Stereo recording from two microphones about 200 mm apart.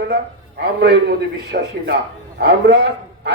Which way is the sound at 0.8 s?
55° right (ahead or behind).